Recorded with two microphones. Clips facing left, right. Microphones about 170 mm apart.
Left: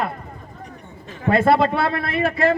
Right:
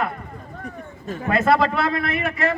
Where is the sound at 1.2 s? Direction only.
30° left (ahead or behind).